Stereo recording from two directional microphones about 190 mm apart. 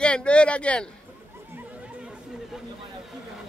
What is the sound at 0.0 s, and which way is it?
Speech, 5° left (ahead or behind).